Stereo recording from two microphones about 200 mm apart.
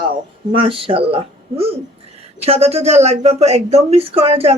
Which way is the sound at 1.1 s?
30° right (ahead or behind).